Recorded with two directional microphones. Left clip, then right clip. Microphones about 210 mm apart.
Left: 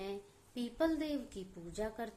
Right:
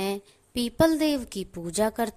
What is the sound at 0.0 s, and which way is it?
A woman's voice, 45° right (ahead or behind).